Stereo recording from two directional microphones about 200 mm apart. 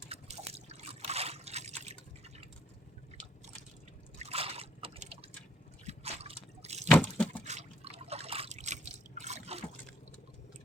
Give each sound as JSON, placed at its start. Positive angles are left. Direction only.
{"t": 0.1, "sound": "trickle", "side_deg": -30}
{"t": 4.2, "sound": "liquid", "side_deg": -30}
{"t": 6.8, "sound": "liquid", "side_deg": 5}
{"t": 7.4, "sound": "liquid", "side_deg": -35}